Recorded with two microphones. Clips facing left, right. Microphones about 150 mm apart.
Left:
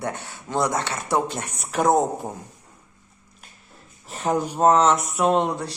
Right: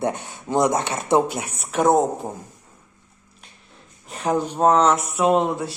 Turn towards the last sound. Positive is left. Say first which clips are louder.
# right 2 dB
turn(degrees=0)  # may be behind; listen again after turning